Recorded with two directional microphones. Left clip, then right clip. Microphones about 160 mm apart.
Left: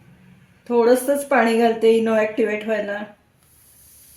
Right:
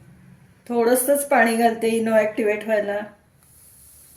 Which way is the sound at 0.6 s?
20° left (ahead or behind).